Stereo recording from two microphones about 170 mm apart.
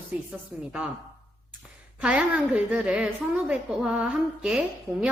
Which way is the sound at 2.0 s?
5° right (ahead or behind).